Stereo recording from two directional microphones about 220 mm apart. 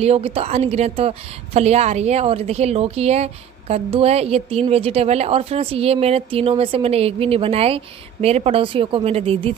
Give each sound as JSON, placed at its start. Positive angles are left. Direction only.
{"t": 0.0, "sound": "a woman's voice", "side_deg": -25}